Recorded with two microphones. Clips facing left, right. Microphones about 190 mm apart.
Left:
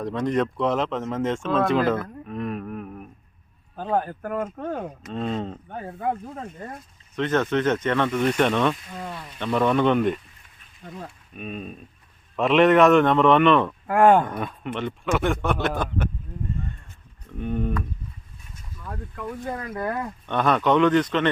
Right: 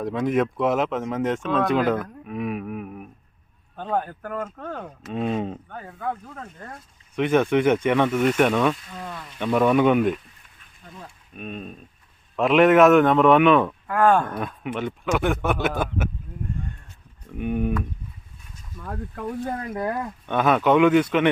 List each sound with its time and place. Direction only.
0.0 s speech: 5° right (ahead or behind)
3.8 s speech: 5° left (ahead or behind)
5.0 s speech: 10° right (ahead or behind)
5.8 s speech: 25° left (ahead or behind)
7.2 s speech: 10° right (ahead or behind)
8.9 s speech: 10° left (ahead or behind)
9.4 s speech: 10° right (ahead or behind)
11.3 s speech: centre (ahead or behind)
13.8 s speech: 25° left (ahead or behind)
14.3 s speech: centre (ahead or behind)
17.3 s speech: 10° right (ahead or behind)
19.7 s speech: 10° right (ahead or behind)